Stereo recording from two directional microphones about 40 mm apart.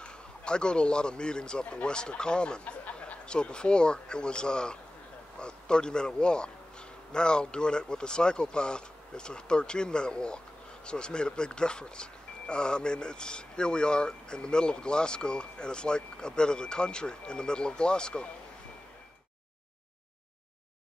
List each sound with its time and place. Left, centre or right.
0.0 s speech: left
2.6 s a sound: left
3.3 s speech: left